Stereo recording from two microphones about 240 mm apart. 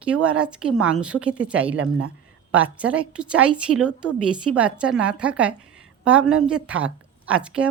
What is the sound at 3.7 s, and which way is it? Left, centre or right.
Speech, right.